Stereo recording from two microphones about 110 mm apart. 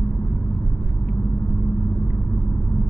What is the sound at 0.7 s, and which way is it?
Vehicle, 15° left (ahead or behind).